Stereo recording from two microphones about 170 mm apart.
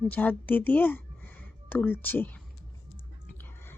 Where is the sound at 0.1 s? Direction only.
10° left (ahead or behind).